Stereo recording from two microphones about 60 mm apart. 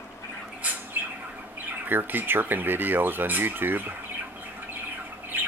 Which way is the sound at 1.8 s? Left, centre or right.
Right.